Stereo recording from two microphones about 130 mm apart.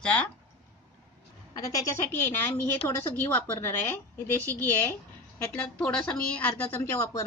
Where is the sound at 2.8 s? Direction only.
15° left (ahead or behind).